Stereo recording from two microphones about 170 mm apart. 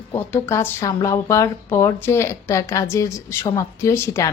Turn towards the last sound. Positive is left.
turn(degrees=15)  # may be behind; listen again after turning